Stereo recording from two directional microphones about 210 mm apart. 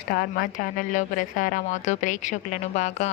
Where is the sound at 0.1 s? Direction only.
45° left (ahead or behind).